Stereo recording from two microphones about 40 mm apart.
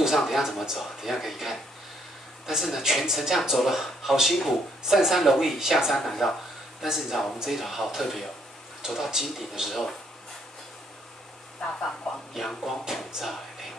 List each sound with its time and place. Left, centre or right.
0.0 s speech: centre
5.9 s speech: centre
6.8 s speech: centre
7.6 s speech: centre
8.8 s speech: centre
12.1 s speech: centre
12.6 s speech: centre